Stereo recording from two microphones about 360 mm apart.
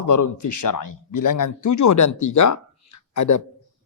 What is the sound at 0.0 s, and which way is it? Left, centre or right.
A man's voice, left.